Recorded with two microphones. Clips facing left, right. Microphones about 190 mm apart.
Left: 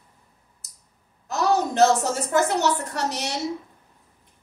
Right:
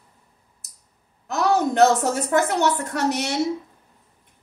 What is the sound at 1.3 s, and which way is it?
Speech, 60° right (ahead or behind).